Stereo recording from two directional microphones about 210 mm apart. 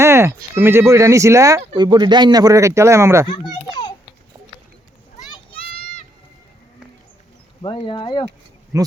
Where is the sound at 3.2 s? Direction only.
20° left (ahead or behind).